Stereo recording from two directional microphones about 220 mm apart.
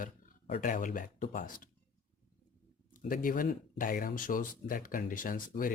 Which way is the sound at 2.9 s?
40° left (ahead or behind).